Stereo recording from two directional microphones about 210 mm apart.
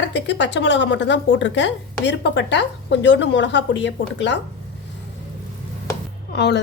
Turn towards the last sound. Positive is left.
turn(degrees=55)  # may be behind; listen again after turning